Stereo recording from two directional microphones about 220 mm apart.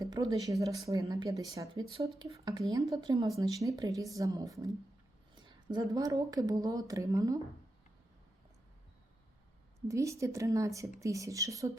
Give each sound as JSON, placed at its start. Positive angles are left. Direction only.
{"t": 0.0, "sound": "speech", "side_deg": -15}
{"t": 9.9, "sound": "speech", "side_deg": -15}